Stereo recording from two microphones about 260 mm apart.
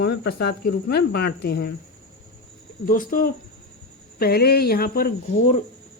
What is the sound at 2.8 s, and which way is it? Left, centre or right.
A woman's voice, left.